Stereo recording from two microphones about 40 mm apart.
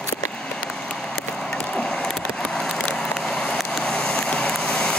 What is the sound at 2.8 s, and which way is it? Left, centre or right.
Vehicle, left.